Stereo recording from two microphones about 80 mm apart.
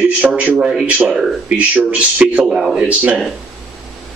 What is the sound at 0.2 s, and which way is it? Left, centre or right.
Speech, centre.